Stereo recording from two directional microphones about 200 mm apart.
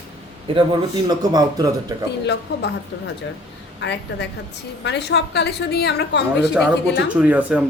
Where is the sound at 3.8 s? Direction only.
60° left (ahead or behind).